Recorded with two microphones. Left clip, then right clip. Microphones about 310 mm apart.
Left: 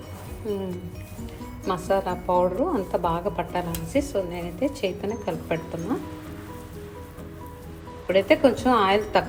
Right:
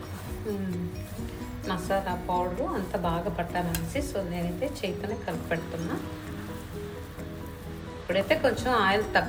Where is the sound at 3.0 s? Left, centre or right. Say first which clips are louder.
Left 4 dB; centre.